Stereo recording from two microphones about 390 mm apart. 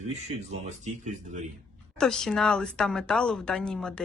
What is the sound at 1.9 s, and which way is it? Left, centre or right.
A woman's voice, centre.